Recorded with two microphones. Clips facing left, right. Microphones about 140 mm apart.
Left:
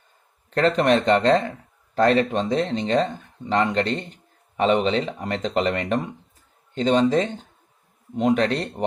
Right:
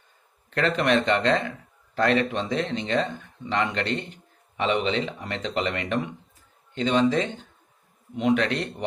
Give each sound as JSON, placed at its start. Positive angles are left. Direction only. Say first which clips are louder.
{"t": 0.5, "sound": "speech", "louder": "left 4 dB", "side_deg": 35}